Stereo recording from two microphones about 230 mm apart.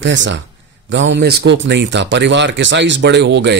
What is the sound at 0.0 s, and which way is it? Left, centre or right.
Speech, right.